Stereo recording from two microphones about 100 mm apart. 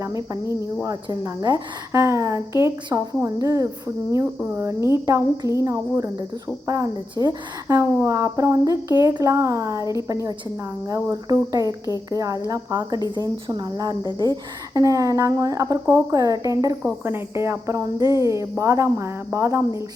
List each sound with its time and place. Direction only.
0.0 s cricket: 35° right (ahead or behind)
1.2 s speech: 40° right (ahead or behind)
17.0 s speech: 25° right (ahead or behind)